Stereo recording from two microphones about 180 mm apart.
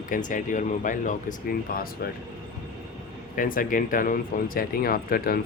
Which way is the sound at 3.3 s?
50° left (ahead or behind).